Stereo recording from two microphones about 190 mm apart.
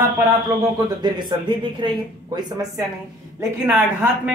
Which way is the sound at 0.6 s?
20° right (ahead or behind).